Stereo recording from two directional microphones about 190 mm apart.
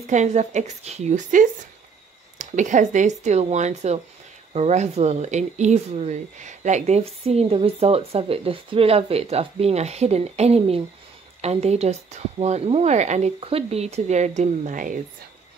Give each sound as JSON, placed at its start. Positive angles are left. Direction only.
{"t": 0.0, "sound": "speech", "side_deg": -40}